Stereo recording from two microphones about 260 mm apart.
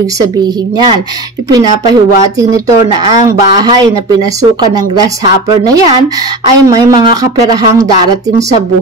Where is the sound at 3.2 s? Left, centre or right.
Centre.